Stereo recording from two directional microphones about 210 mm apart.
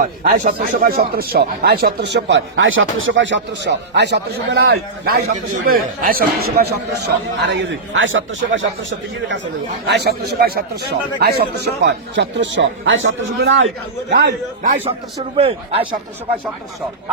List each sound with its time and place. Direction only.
0.0 s speech: 40° right (ahead or behind); by 8.6 s 65° right (ahead or behind)
9.8 s a man's voice: 50° right (ahead or behind)
14.1 s speech: 50° right (ahead or behind)
15.4 s a man's voice: 25° right (ahead or behind)